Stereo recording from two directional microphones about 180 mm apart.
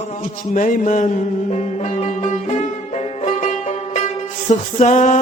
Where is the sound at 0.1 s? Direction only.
45° left (ahead or behind).